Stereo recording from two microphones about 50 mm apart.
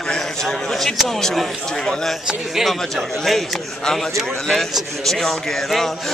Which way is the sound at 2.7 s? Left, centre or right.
Centre.